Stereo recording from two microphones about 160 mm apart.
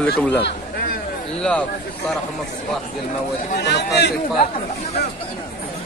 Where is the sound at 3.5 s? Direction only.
90° left.